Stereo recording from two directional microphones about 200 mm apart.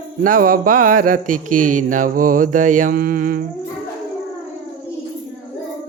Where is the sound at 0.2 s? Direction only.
45° right (ahead or behind).